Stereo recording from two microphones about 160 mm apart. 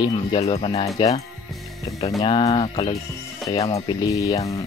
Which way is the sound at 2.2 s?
30° left (ahead or behind).